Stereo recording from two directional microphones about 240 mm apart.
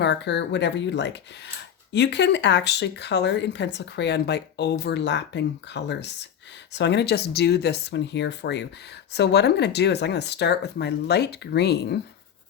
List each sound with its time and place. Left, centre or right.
0.0 s speech: left